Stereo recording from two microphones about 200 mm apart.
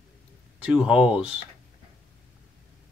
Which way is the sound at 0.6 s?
5° right (ahead or behind).